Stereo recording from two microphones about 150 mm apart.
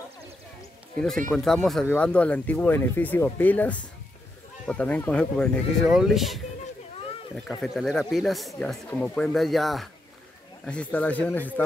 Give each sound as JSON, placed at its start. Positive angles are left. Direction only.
{"t": 1.3, "sound": "speech", "side_deg": 5}